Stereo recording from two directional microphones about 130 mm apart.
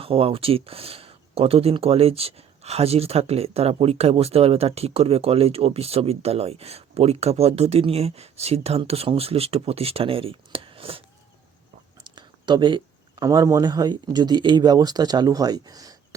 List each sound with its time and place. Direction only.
0.0 s speech: 45° right (ahead or behind)
12.0 s speech: 35° right (ahead or behind)